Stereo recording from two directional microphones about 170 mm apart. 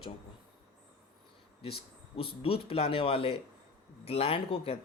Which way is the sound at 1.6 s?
35° left (ahead or behind).